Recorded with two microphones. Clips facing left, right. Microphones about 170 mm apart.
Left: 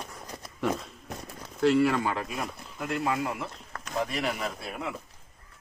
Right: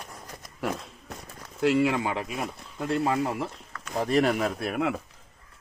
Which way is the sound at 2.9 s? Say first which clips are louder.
Right 4 dB; 30° right (ahead or behind).